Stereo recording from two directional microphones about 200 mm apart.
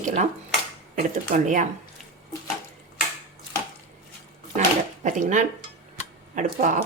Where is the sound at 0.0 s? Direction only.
35° right (ahead or behind).